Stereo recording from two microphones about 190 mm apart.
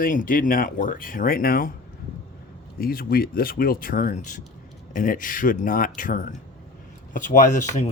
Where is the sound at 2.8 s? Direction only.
50° left (ahead or behind).